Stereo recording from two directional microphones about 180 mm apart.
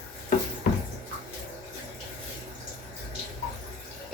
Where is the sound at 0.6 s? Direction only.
45° left (ahead or behind).